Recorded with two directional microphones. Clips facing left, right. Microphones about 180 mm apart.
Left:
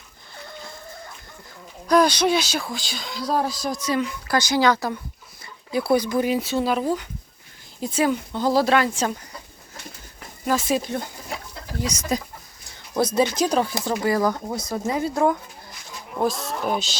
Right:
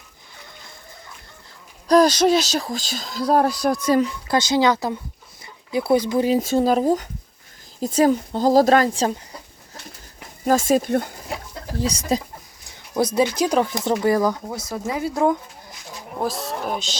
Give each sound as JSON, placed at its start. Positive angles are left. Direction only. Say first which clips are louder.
{"t": 1.9, "sound": "speech", "louder": "right 3 dB", "side_deg": -40}
{"t": 4.3, "sound": "speech", "louder": "even", "side_deg": -25}
{"t": 6.3, "sound": "speech", "louder": "right 4 dB", "side_deg": -45}
{"t": 10.4, "sound": "speech", "louder": "right 5 dB", "side_deg": -45}
{"t": 11.8, "sound": "speech", "louder": "right 3 dB", "side_deg": -30}
{"t": 13.0, "sound": "speech", "louder": "right 1 dB", "side_deg": -15}
{"t": 14.5, "sound": "speech", "louder": "left 1 dB", "side_deg": -5}
{"t": 16.2, "sound": "speech", "louder": "left 2 dB", "side_deg": 0}